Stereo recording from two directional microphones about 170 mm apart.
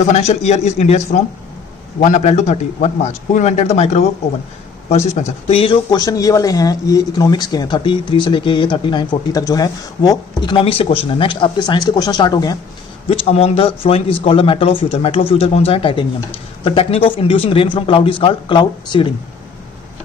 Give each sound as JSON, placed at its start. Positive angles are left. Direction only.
{"t": 0.1, "sound": "speech", "side_deg": 40}
{"t": 5.0, "sound": "speech", "side_deg": 40}
{"t": 13.1, "sound": "speech", "side_deg": 35}